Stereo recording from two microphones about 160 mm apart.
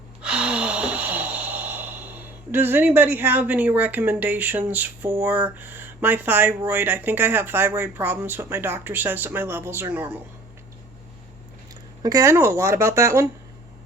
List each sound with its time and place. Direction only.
0.2 s sigh: 5° right (ahead or behind)
11.7 s speech: 20° right (ahead or behind)